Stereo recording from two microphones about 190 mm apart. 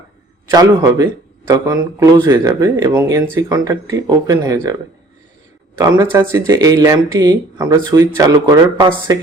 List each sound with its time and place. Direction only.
0.5 s speech: 20° right (ahead or behind)